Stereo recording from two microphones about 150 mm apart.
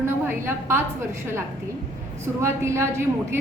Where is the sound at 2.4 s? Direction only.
15° right (ahead or behind).